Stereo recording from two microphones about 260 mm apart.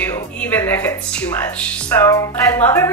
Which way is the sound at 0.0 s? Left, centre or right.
Centre.